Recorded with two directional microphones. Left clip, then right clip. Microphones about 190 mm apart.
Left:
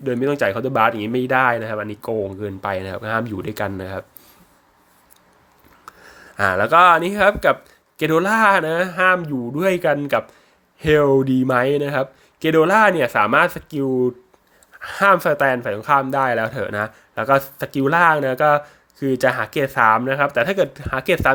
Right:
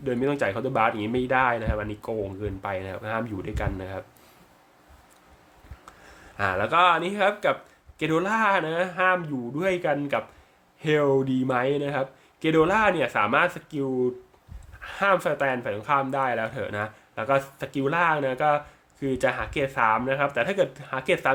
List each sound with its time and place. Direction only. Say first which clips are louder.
0.0 s speech: left 6 dB; 20° left (ahead or behind)
5.8 s speech: left 8 dB; 25° left (ahead or behind)